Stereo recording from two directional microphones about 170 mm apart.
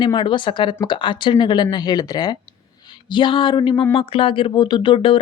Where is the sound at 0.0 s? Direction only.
30° left (ahead or behind).